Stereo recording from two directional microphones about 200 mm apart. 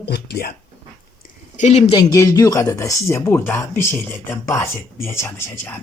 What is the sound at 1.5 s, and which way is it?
Speech, 35° left (ahead or behind).